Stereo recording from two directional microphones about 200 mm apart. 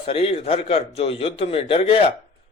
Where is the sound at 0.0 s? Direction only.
30° left (ahead or behind).